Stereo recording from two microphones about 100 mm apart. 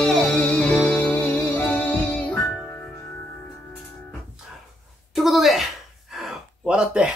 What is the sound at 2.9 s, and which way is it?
Music, 25° left (ahead or behind).